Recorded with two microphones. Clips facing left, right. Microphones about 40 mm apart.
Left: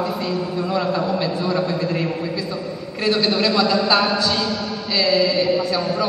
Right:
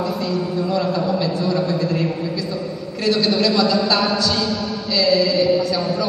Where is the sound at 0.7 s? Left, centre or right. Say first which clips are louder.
Left 1 dB; centre.